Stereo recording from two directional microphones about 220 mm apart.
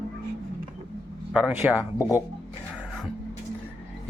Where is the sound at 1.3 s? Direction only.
5° right (ahead or behind).